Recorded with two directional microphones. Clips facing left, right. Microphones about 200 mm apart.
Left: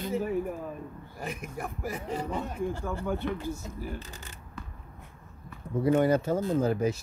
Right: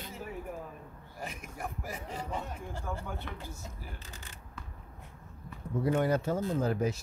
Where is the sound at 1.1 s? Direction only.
60° left (ahead or behind).